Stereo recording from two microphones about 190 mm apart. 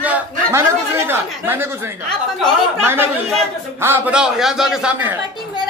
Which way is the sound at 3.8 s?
10° right (ahead or behind).